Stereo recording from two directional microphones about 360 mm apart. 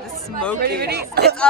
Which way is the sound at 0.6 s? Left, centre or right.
Right.